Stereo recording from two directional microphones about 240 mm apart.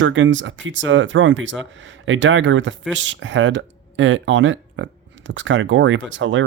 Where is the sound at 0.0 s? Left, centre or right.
Right.